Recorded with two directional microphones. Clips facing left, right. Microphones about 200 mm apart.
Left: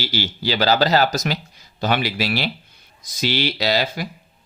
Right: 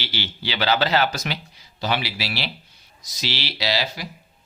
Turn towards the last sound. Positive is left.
turn(degrees=50)  # may be behind; listen again after turning